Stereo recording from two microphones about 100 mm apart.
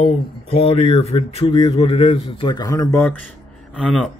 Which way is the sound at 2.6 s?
35° left (ahead or behind).